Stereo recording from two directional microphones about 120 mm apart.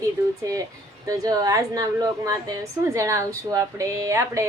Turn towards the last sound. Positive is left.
turn(degrees=-25)  # may be behind; listen again after turning